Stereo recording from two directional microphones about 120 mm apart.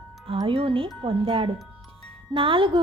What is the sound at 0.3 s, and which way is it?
Speech, 50° right (ahead or behind).